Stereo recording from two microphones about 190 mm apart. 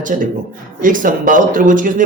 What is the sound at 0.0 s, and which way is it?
Speech, 45° right (ahead or behind).